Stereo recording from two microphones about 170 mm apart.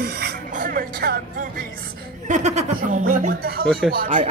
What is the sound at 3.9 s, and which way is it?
Speech, 50° right (ahead or behind).